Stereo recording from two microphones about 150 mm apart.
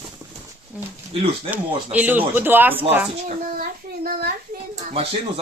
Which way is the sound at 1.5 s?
10° right (ahead or behind).